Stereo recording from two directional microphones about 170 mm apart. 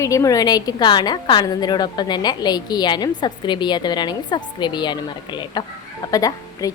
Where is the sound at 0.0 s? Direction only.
20° left (ahead or behind).